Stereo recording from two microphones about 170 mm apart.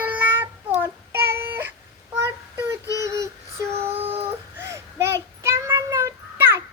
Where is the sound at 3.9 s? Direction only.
35° right (ahead or behind).